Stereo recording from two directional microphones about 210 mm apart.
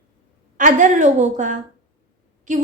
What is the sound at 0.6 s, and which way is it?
A woman's voice, 35° right (ahead or behind).